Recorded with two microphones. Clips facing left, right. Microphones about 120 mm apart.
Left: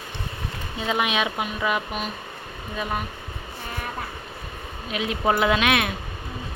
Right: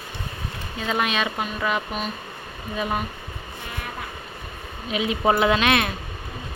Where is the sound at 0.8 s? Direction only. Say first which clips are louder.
Even; 10° left (ahead or behind).